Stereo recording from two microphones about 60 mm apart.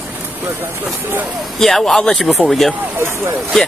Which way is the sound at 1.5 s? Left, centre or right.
Centre.